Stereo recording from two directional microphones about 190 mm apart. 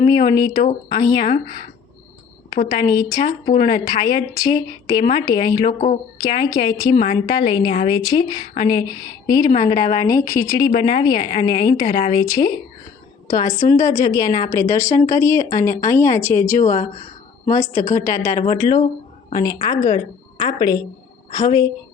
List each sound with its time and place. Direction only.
0.3 s a woman's voice: 20° left (ahead or behind)
1.3 s speech: 50° left (ahead or behind)
2.6 s a woman's voice: 20° left (ahead or behind)
3.2 s speech: 45° left (ahead or behind)
3.7 s a woman's voice: 25° left (ahead or behind)
5.6 s speech: 45° left (ahead or behind)
6.1 s a woman's voice: 20° left (ahead or behind)
16.6 s speech: 40° left (ahead or behind)
17.9 s a woman's voice: 15° left (ahead or behind)